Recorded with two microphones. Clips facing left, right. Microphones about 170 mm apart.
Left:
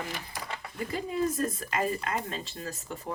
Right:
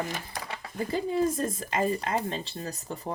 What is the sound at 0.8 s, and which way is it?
Speech, 30° right (ahead or behind).